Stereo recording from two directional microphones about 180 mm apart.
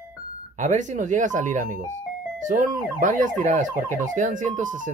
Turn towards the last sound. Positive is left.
turn(degrees=-45)  # may be behind; listen again after turning